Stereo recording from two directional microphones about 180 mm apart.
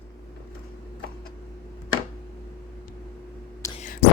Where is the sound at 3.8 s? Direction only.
45° left (ahead or behind).